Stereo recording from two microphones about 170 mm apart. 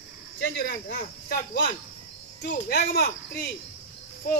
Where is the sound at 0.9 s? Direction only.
60° left (ahead or behind).